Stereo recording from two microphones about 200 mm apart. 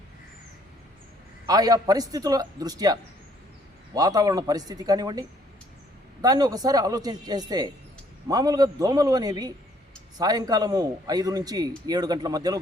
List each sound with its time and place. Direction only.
1.5 s a man's voice: 20° right (ahead or behind)
6.2 s a man's voice: 20° right (ahead or behind)